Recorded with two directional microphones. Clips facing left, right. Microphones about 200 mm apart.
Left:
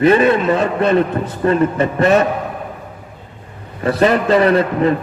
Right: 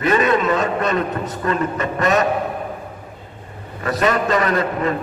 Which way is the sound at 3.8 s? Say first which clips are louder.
Left 5 dB; 30° left (ahead or behind).